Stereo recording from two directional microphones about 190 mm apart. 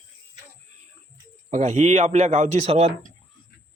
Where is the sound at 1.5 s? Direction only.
40° right (ahead or behind).